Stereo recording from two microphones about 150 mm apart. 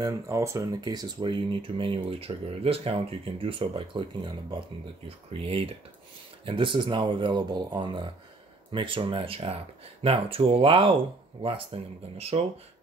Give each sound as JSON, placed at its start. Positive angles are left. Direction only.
{"t": 0.0, "sound": "speech", "side_deg": -20}